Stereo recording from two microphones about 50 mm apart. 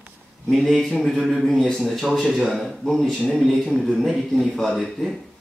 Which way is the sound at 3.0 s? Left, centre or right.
Centre.